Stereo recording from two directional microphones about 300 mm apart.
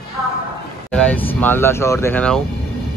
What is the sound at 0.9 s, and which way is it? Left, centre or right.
Speech, centre.